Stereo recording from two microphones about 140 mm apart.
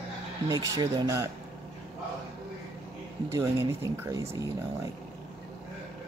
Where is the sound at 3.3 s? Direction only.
20° right (ahead or behind).